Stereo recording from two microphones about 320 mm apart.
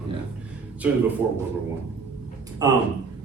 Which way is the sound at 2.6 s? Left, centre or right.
Centre.